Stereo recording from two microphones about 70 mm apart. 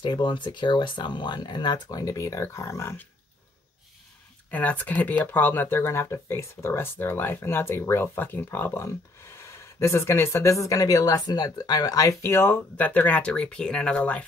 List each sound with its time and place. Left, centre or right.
0.0 s speech: left
4.5 s speech: left
12.7 s speech: left